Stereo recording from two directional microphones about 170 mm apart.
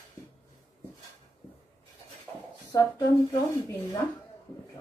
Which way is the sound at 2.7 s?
15° left (ahead or behind).